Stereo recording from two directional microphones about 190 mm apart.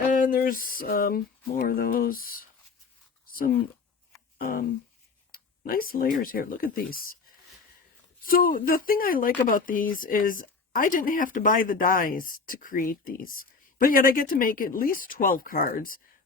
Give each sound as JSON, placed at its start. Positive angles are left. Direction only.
{"t": 0.2, "sound": "speech", "side_deg": 45}
{"t": 3.2, "sound": "a sound", "side_deg": 50}
{"t": 4.4, "sound": "speech", "side_deg": 50}
{"t": 5.3, "sound": "a sound", "side_deg": 50}
{"t": 6.2, "sound": "speech", "side_deg": 50}
{"t": 8.2, "sound": "speech", "side_deg": 50}